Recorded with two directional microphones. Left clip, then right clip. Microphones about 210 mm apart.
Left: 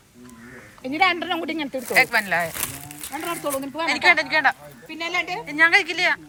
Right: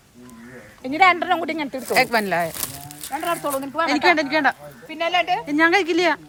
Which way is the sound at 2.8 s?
30° right (ahead or behind).